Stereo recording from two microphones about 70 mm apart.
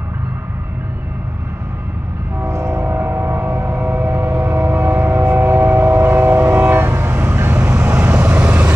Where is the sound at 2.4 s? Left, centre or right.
Right.